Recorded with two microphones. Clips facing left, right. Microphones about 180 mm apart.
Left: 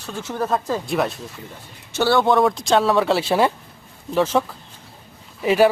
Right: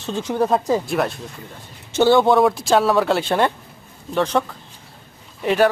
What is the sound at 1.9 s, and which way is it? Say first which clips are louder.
Speech: right 4 dB; 20° right (ahead or behind).